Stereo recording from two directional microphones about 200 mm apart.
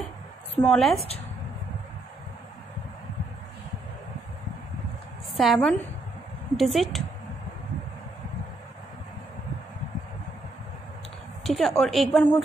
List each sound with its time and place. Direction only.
0.7 s a woman's voice: centre (ahead or behind)
0.9 s speech: 30° left (ahead or behind)
5.3 s a woman's voice: centre (ahead or behind)
11.4 s a woman's voice: centre (ahead or behind)